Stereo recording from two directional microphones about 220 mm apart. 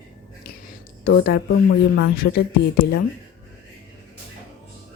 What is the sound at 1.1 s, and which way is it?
Speech, 45° left (ahead or behind).